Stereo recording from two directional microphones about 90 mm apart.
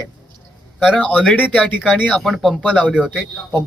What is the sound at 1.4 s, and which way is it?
Speech, 10° right (ahead or behind).